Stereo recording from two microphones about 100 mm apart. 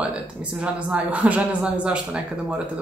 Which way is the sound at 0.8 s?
15° right (ahead or behind).